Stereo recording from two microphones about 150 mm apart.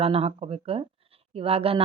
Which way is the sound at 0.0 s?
40° right (ahead or behind).